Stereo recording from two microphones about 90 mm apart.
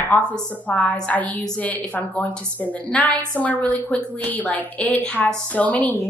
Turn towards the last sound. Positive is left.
turn(degrees=15)  # may be behind; listen again after turning